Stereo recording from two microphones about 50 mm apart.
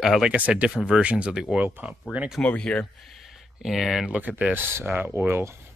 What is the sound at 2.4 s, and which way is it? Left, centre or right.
Speech, left.